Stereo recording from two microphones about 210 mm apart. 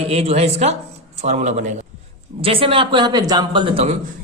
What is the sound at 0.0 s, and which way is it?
Speech, 30° right (ahead or behind).